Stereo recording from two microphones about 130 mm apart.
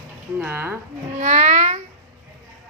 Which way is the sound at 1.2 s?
65° right (ahead or behind).